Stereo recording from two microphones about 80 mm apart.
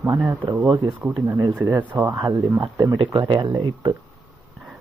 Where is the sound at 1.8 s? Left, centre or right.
Right.